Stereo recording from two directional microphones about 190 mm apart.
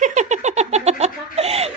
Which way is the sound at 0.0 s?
40° right (ahead or behind).